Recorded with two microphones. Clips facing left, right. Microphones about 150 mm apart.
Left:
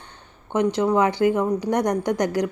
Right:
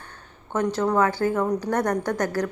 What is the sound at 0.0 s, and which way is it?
A woman's voice, 15° left (ahead or behind).